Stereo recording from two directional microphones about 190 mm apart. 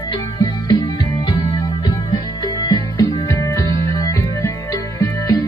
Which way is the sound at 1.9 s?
20° left (ahead or behind).